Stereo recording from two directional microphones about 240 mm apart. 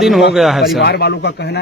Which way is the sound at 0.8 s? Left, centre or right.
Left.